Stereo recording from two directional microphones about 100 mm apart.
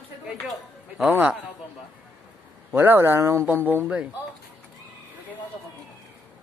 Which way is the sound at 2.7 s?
20° right (ahead or behind).